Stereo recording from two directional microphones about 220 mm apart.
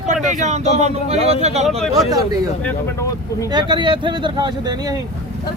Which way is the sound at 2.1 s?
15° right (ahead or behind).